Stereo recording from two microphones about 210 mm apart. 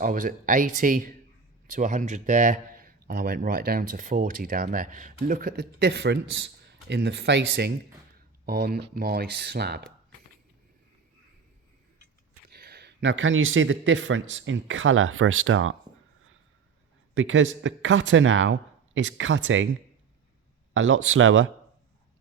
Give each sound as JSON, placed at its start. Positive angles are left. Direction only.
{"t": 0.0, "sound": "a man's voice", "side_deg": -40}
{"t": 12.5, "sound": "speech", "side_deg": -45}
{"t": 17.2, "sound": "speech", "side_deg": -65}
{"t": 20.7, "sound": "speech", "side_deg": -60}